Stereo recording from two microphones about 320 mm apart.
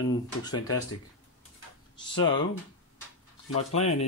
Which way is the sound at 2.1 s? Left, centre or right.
Centre.